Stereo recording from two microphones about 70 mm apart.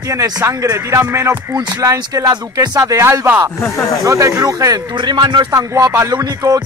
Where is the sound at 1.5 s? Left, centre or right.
Right.